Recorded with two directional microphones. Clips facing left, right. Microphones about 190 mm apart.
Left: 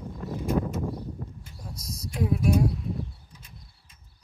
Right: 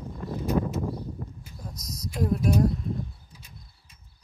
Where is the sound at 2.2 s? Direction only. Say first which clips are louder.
Right 1 dB; 5° left (ahead or behind).